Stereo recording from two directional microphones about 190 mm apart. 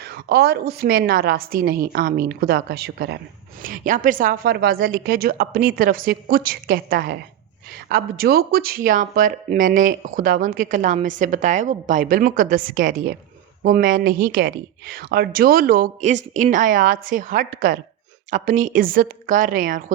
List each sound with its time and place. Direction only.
0.0 s a woman's voice: 55° right (ahead or behind)
3.6 s speech: 45° right (ahead or behind)